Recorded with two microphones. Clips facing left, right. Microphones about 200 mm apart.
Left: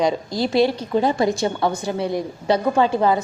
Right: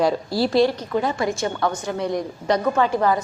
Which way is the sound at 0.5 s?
25° left (ahead or behind).